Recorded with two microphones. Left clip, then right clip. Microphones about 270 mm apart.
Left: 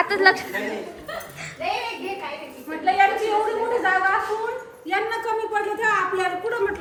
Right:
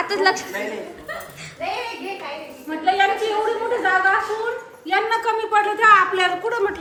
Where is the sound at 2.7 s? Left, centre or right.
Right.